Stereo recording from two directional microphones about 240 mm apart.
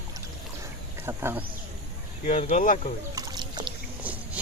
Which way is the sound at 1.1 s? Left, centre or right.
Centre.